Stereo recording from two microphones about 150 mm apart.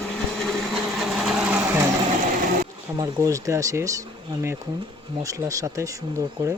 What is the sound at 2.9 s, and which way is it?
Speech, 20° right (ahead or behind).